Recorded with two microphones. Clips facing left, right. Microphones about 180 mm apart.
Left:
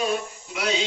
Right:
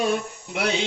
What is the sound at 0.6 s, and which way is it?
Snake, 55° right (ahead or behind).